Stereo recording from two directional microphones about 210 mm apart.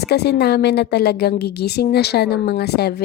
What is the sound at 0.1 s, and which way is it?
A woman's voice, 50° left (ahead or behind).